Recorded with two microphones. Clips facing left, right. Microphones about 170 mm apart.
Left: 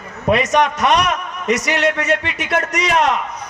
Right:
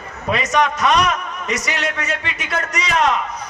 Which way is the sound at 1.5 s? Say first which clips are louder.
Left 7 dB; 65° left (ahead or behind).